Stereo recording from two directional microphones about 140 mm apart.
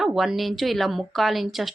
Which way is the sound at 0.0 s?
5° right (ahead or behind).